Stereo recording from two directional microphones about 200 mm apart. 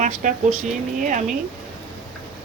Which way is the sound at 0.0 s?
40° right (ahead or behind).